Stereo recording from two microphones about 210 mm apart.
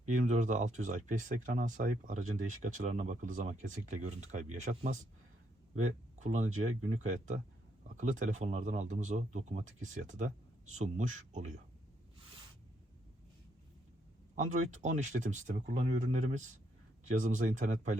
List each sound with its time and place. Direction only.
0.2 s speech: 35° right (ahead or behind)
14.3 s speech: 35° right (ahead or behind)